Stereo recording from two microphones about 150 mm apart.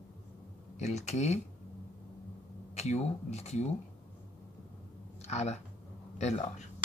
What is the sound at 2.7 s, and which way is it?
Speech, 45° left (ahead or behind).